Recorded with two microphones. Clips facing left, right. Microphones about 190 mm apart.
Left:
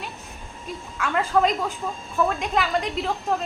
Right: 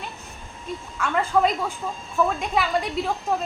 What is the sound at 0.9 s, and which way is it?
A woman's voice, centre (ahead or behind).